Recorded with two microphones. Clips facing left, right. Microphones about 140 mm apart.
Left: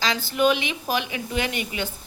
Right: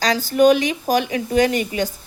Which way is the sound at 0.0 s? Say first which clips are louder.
Right 7 dB; 40° right (ahead or behind).